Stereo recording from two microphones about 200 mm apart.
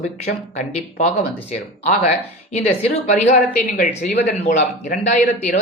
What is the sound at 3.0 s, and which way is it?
Speech, 40° left (ahead or behind).